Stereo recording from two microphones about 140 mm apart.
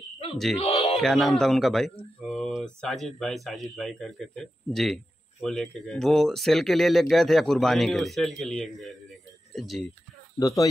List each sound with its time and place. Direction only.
0.6 s a sound: 50° left (ahead or behind)
0.9 s speech: centre (ahead or behind)
10.4 s speech: 25° left (ahead or behind)